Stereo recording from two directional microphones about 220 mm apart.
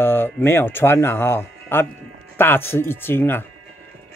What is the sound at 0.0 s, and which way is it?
Speech, 10° left (ahead or behind).